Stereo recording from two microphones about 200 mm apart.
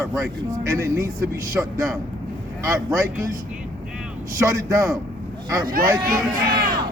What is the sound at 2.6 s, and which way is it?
Speech, 15° right (ahead or behind).